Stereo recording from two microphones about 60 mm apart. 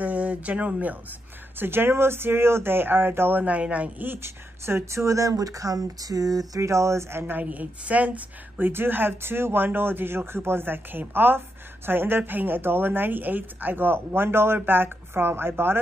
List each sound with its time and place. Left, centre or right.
0.0 s a sound: right
1.6 s a woman's voice: right
4.1 s speech: right
6.6 s speech: right
7.4 s a woman's voice: right